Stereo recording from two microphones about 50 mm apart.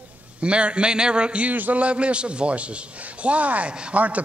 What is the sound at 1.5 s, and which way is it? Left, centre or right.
Speech, right.